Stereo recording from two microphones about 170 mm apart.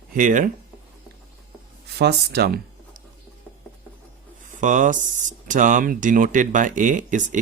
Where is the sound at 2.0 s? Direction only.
70° right (ahead or behind).